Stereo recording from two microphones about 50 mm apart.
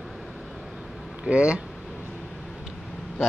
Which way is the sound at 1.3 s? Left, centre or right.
Right.